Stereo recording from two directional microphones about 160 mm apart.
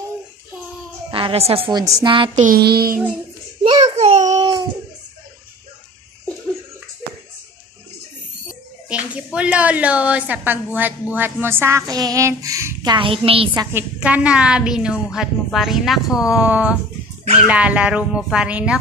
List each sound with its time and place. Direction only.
1.1 s a woman's voice: 35° right (ahead or behind)
2.3 s music: 55° right (ahead or behind)
2.6 s child singing: 75° right (ahead or behind)
3.6 s child singing: 25° right (ahead or behind)
3.9 s child singing: 50° right (ahead or behind)
4.4 s a sound: 25° right (ahead or behind)
8.8 s a woman's voice: 5° right (ahead or behind); by 13.5 s 35° right (ahead or behind)
13.7 s a woman's voice: 10° right (ahead or behind)